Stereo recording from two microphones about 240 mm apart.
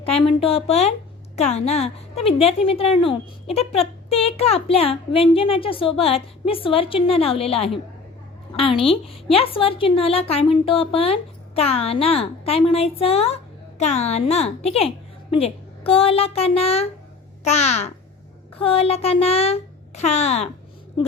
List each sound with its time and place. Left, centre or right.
0.3 s a woman's voice: left